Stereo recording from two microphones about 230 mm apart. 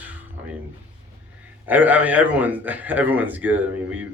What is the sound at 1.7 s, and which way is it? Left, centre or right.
Speech, centre.